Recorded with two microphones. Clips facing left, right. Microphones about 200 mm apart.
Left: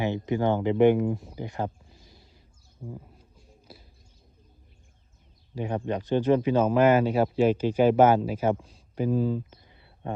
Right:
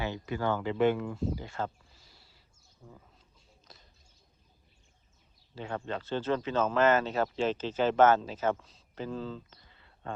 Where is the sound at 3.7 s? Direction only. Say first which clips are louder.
Left 8 dB; 5° left (ahead or behind).